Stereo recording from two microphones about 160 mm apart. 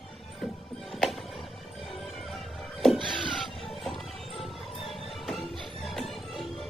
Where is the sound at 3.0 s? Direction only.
30° right (ahead or behind).